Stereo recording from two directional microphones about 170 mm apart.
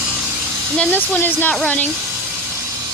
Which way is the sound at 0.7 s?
10° left (ahead or behind).